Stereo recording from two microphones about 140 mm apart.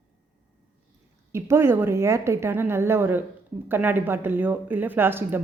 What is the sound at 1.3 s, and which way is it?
A woman's voice, 20° right (ahead or behind).